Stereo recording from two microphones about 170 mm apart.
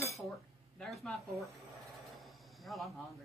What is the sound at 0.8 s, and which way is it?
Speech, centre (ahead or behind).